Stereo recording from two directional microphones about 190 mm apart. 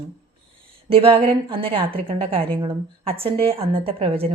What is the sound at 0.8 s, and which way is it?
A woman's voice, 30° right (ahead or behind).